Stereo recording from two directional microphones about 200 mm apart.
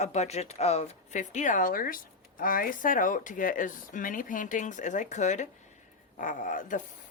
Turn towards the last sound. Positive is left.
turn(degrees=40)  # may be behind; listen again after turning